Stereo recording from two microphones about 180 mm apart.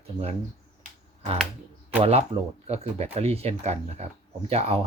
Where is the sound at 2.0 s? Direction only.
35° right (ahead or behind).